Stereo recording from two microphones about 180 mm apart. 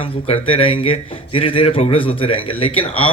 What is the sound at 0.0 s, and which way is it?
Speech, 30° left (ahead or behind).